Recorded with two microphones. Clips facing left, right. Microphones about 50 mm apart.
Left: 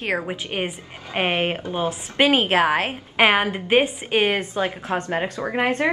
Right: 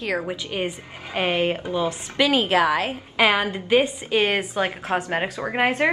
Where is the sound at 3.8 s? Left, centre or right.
Left.